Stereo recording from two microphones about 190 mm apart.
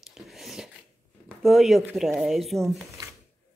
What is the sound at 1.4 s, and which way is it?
Speech, centre (ahead or behind).